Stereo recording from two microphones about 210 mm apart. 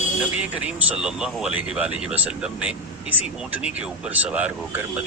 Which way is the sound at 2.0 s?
5° right (ahead or behind).